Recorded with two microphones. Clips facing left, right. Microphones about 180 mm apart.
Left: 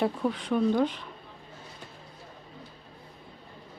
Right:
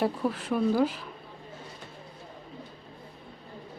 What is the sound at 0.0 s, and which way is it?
Speech, 5° right (ahead or behind).